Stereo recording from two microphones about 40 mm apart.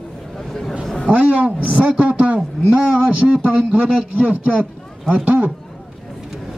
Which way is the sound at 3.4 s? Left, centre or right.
Right.